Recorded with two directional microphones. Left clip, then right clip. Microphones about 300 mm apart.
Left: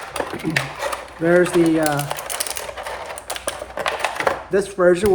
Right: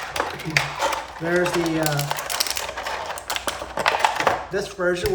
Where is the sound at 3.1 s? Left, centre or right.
Centre.